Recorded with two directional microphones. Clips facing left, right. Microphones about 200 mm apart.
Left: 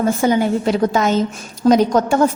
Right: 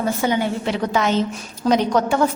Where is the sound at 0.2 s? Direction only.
40° left (ahead or behind).